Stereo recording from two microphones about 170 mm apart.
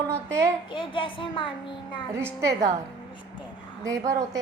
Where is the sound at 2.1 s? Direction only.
15° right (ahead or behind).